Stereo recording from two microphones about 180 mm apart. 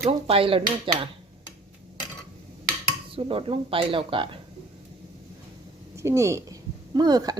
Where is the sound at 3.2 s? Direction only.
30° right (ahead or behind).